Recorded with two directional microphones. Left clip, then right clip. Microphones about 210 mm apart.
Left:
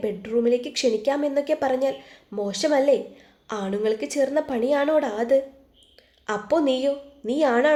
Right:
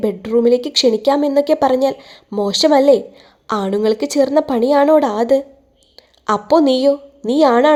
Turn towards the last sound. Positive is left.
turn(degrees=-35)  # may be behind; listen again after turning